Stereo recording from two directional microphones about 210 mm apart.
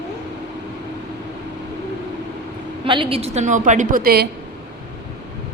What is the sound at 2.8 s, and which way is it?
A woman's voice, 25° right (ahead or behind).